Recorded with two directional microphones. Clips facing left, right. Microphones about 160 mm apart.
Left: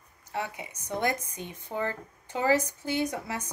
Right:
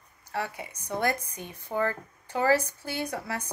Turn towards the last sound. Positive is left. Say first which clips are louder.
# left 2 dB
turn(degrees=20)  # may be behind; listen again after turning